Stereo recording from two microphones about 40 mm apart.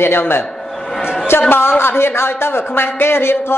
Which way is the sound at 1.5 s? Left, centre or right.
Left.